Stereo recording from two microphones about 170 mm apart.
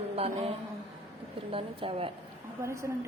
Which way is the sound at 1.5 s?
35° right (ahead or behind).